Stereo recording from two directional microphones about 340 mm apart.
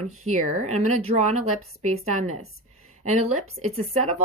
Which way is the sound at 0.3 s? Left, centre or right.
Right.